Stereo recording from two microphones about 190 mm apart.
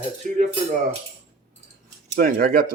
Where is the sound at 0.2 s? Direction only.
40° right (ahead or behind).